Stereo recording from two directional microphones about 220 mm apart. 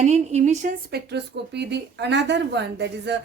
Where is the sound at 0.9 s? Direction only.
50° right (ahead or behind).